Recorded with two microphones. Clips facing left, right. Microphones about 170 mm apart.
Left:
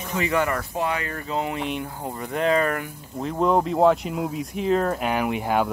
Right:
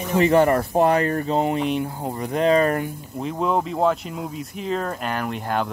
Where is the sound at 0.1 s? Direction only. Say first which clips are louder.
Right 7 dB; 35° right (ahead or behind).